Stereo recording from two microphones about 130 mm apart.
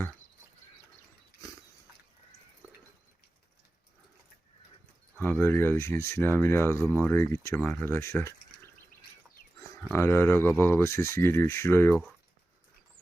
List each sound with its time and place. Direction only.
5.2 s speech: 15° left (ahead or behind)
9.9 s speech: 20° left (ahead or behind)